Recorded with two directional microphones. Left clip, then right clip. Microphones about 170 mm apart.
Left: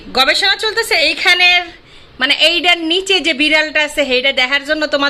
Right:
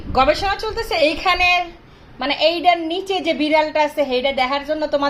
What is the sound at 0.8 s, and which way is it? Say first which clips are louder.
A woman's voice: left 5 dB; 25° left (ahead or behind).